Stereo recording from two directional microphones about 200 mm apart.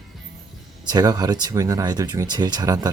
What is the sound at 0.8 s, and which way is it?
Speech, 20° right (ahead or behind).